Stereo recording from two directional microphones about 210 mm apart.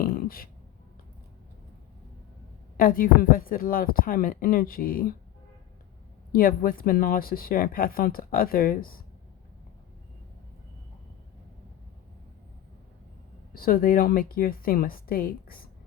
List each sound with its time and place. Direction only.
0.0 s a sound: 45° left (ahead or behind)
2.7 s speech: 40° left (ahead or behind)
6.3 s speech: 40° left (ahead or behind)
13.5 s speech: 45° left (ahead or behind)